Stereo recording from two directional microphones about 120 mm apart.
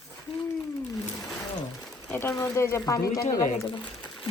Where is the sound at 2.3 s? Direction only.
25° left (ahead or behind).